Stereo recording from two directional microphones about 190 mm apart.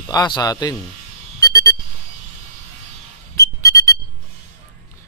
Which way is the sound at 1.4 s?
20° left (ahead or behind).